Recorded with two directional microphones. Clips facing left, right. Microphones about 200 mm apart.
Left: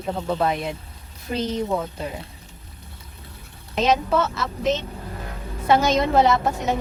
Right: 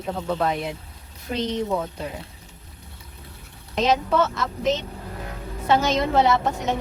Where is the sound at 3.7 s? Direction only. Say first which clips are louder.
Left 1 dB; 5° left (ahead or behind).